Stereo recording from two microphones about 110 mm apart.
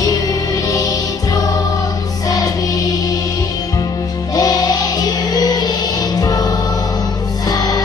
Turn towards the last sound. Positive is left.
turn(degrees=35)  # may be behind; listen again after turning